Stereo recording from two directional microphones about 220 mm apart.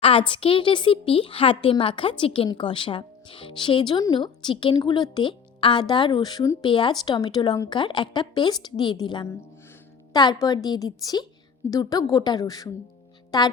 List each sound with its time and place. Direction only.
0.0 s a woman's voice: 25° left (ahead or behind)